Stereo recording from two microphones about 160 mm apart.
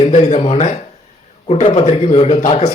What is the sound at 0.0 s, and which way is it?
A man's voice, 40° left (ahead or behind).